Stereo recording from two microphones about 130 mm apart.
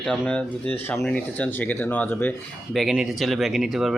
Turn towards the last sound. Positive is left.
turn(degrees=0)  # may be behind; listen again after turning